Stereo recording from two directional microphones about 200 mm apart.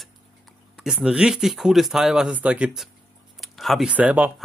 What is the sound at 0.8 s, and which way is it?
Speech, 5° right (ahead or behind).